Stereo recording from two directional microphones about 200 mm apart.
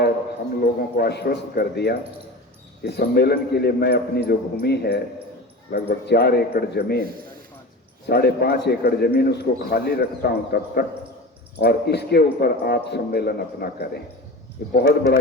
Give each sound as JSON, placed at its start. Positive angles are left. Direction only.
{"t": 0.6, "sound": "a man's voice", "side_deg": 50}
{"t": 8.0, "sound": "speech", "side_deg": 55}